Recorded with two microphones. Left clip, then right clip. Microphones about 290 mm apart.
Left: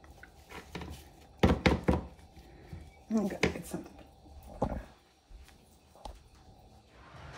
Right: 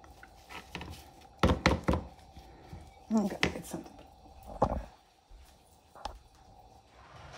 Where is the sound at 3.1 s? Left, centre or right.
Right.